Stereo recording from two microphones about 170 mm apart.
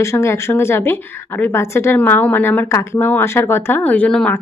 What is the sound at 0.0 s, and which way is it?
Speech, 15° left (ahead or behind).